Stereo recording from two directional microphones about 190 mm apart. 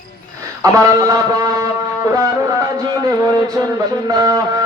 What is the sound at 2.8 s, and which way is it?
Music, 20° right (ahead or behind).